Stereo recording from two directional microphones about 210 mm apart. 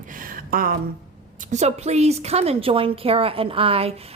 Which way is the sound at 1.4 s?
30° right (ahead or behind).